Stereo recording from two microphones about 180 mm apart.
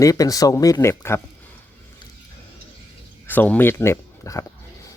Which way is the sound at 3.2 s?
10° left (ahead or behind).